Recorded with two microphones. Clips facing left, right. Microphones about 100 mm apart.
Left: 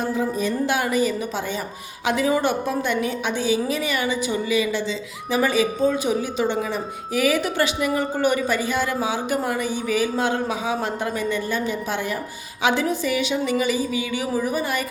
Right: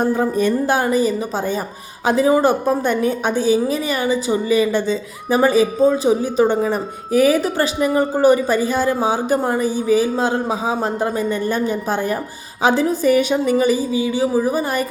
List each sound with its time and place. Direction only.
0.0 s speech: 50° right (ahead or behind)
0.7 s a woman's voice: 35° right (ahead or behind)